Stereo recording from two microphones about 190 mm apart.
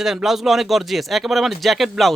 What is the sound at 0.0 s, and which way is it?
Speech, centre (ahead or behind).